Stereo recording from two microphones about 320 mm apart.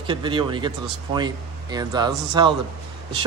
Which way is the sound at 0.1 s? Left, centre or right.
Centre.